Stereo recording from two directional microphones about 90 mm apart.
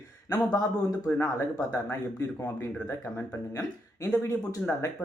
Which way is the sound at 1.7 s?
30° left (ahead or behind).